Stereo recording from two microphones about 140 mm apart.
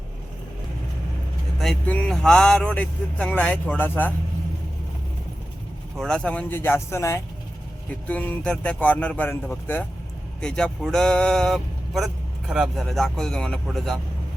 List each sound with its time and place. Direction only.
1.9 s speech: 5° left (ahead or behind)
6.0 s speech: 5° left (ahead or behind)